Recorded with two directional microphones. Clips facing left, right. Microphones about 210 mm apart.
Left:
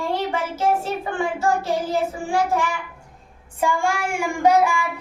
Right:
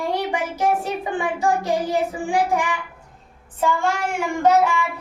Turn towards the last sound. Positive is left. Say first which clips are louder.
# even
turn(degrees=10)  # may be behind; listen again after turning